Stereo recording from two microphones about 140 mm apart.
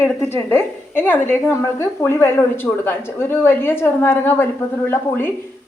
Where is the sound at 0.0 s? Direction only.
15° left (ahead or behind).